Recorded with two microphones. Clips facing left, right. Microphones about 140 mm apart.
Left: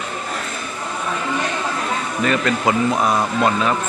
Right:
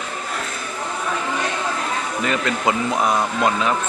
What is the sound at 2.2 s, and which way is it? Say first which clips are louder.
Speech: left 3 dB; 15° right (ahead or behind).